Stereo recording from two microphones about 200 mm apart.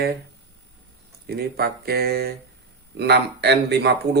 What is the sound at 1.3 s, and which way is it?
Speech, 50° right (ahead or behind).